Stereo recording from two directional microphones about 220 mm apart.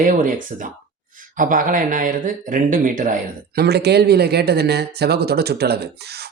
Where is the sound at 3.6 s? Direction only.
50° right (ahead or behind).